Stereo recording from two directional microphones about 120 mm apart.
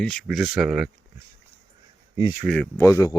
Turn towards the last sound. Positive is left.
turn(degrees=25)  # may be behind; listen again after turning